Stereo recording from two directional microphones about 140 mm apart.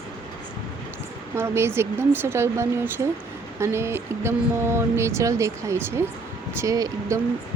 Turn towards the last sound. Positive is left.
turn(degrees=-25)  # may be behind; listen again after turning